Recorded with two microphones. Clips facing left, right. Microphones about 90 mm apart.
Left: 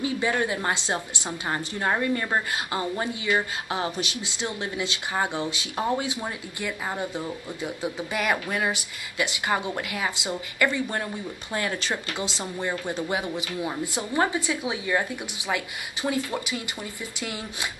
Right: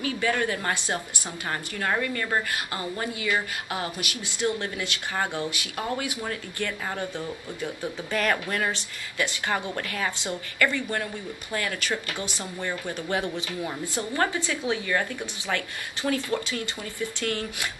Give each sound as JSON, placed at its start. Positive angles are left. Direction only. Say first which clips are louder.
{"t": 0.0, "sound": "a woman's voice", "louder": "left 1 dB", "side_deg": 20}